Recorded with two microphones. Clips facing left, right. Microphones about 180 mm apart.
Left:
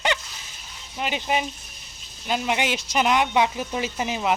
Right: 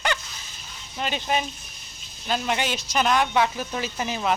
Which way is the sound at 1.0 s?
15° left (ahead or behind).